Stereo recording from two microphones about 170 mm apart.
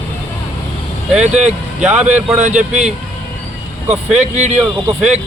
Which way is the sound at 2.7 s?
40° right (ahead or behind).